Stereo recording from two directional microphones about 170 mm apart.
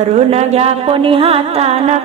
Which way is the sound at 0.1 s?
40° right (ahead or behind).